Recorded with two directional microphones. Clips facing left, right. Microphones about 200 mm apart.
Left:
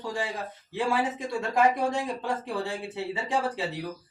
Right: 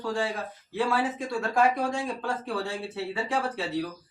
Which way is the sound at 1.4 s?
20° left (ahead or behind).